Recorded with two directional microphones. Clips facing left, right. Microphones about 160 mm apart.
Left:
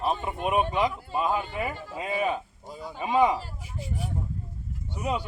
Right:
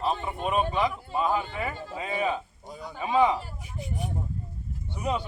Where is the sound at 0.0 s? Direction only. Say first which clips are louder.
Left 1 dB; 10° left (ahead or behind).